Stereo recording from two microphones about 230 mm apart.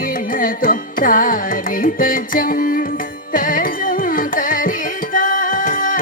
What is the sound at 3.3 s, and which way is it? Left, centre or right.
Carnatic music, left.